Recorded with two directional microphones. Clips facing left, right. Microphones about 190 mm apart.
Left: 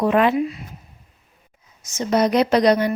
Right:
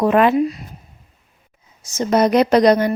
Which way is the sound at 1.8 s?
45° right (ahead or behind).